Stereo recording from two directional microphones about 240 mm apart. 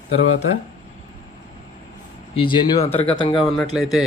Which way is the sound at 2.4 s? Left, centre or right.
Left.